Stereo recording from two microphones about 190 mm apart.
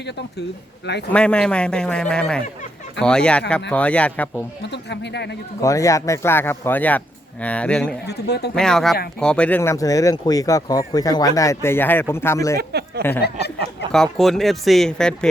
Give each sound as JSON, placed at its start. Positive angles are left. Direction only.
{"t": 1.1, "sound": "speech", "side_deg": 5}
{"t": 4.7, "sound": "speech", "side_deg": 65}
{"t": 5.6, "sound": "speech", "side_deg": 15}
{"t": 8.0, "sound": "speech", "side_deg": 60}
{"t": 8.5, "sound": "speech", "side_deg": 5}
{"t": 12.5, "sound": "speech", "side_deg": -60}
{"t": 13.0, "sound": "speech", "side_deg": 10}